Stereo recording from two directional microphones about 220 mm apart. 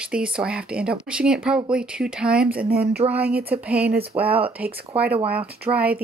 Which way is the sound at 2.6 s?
45° right (ahead or behind).